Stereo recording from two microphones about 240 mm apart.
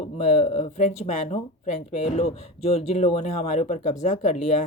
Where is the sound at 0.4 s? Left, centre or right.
Left.